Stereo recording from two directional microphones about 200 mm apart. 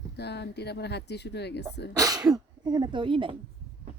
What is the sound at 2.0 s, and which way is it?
A woman's voice, 20° right (ahead or behind).